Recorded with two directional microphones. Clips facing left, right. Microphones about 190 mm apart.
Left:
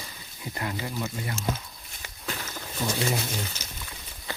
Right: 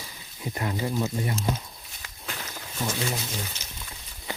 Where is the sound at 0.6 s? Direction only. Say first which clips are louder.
Right 4 dB; 20° right (ahead or behind).